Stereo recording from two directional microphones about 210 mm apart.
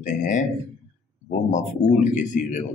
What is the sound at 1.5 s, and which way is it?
Speech, 35° left (ahead or behind).